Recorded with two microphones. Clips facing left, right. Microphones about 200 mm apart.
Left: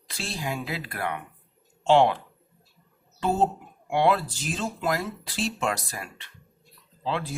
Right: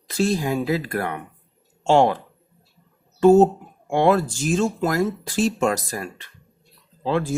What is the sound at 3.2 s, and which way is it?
Speech, 45° right (ahead or behind).